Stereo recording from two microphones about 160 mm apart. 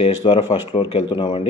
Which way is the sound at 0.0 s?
35° left (ahead or behind).